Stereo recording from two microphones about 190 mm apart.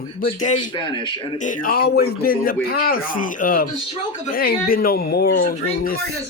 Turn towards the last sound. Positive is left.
turn(degrees=50)  # may be behind; listen again after turning